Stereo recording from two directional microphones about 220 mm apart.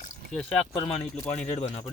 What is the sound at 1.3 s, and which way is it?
Speech, 30° left (ahead or behind).